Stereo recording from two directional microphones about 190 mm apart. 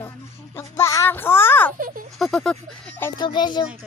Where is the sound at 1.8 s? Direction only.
45° right (ahead or behind).